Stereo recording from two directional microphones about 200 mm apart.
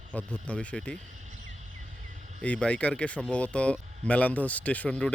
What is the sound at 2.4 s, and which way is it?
Speech, 5° left (ahead or behind).